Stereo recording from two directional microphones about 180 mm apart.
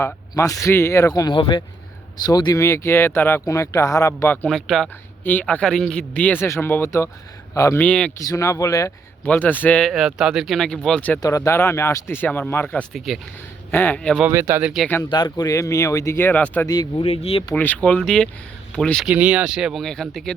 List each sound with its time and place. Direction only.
0.0 s speech: 20° left (ahead or behind)
4.4 s speech: centre (ahead or behind)
8.2 s speech: 20° left (ahead or behind)
11.2 s speech: 15° left (ahead or behind)
14.3 s speech: 15° right (ahead or behind)
15.1 s speech: 25° left (ahead or behind)
16.6 s speech: 20° left (ahead or behind)
17.1 s speech: 35° left (ahead or behind)
17.5 s speech: 10° left (ahead or behind)
19.1 s speech: 5° right (ahead or behind)